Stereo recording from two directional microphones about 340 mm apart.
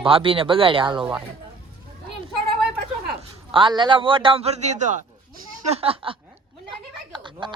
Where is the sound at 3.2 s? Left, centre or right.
Centre.